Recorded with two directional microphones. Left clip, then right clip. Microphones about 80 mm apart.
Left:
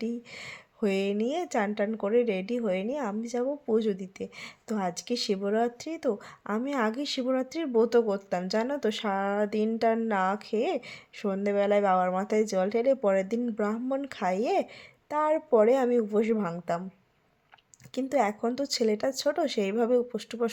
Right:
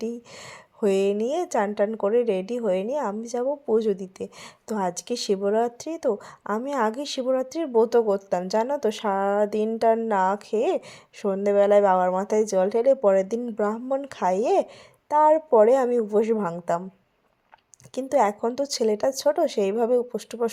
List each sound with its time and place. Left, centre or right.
0.0 s a woman's voice: right
17.9 s a woman's voice: right